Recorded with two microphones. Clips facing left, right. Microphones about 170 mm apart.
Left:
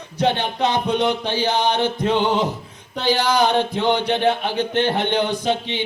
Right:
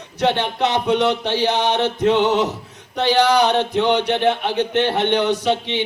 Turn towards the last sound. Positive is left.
turn(degrees=-70)  # may be behind; listen again after turning